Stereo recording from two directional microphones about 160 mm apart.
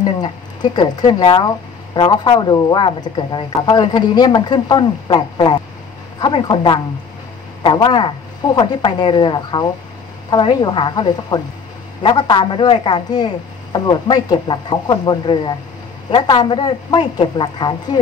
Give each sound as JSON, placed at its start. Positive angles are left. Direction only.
{"t": 0.0, "sound": "speech", "side_deg": 25}